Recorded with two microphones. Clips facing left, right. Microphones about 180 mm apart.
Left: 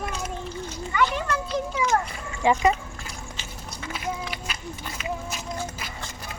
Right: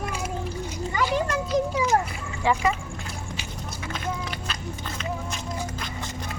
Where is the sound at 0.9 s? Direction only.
35° right (ahead or behind).